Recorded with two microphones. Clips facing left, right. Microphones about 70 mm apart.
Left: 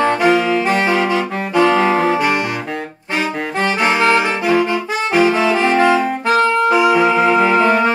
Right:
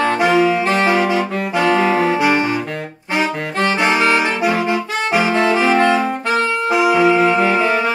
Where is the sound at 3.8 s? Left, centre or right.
Centre.